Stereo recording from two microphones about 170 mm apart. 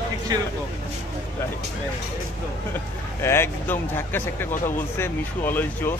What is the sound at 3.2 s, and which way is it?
Speech, 15° left (ahead or behind).